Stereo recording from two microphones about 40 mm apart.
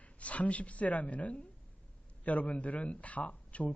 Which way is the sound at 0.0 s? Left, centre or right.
Left.